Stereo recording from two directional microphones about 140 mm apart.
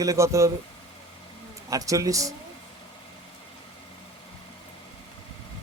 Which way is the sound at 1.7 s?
25° right (ahead or behind).